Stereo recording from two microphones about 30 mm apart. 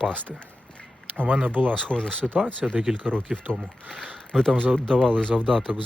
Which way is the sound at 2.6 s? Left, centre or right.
Right.